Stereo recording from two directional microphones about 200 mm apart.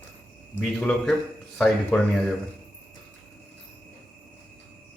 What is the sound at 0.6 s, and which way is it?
Speech, centre (ahead or behind).